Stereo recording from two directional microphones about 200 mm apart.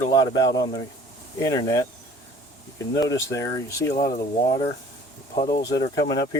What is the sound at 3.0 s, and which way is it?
Speech, 15° left (ahead or behind).